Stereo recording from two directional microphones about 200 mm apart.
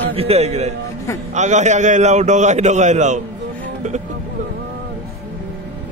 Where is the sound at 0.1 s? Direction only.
30° right (ahead or behind).